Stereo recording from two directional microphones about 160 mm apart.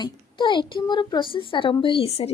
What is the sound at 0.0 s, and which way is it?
A woman's voice, 30° left (ahead or behind).